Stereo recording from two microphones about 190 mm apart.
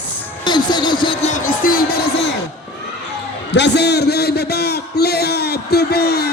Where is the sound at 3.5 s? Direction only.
65° left (ahead or behind).